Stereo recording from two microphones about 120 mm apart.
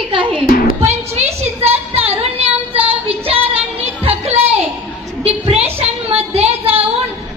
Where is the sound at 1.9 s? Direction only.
60° right (ahead or behind).